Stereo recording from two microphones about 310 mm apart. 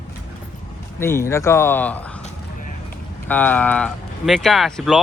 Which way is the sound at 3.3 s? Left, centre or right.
Centre.